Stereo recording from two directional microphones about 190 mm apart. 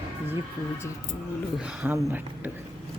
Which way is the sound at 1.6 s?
10° right (ahead or behind).